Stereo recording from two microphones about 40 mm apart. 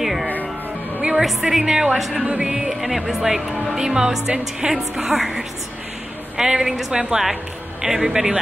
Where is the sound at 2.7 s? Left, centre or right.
Centre.